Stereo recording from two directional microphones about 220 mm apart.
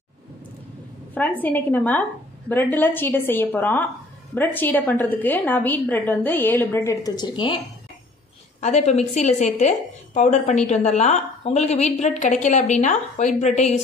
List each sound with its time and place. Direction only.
1.4 s a woman's voice: 10° left (ahead or behind)
8.5 s a woman's voice: 30° left (ahead or behind)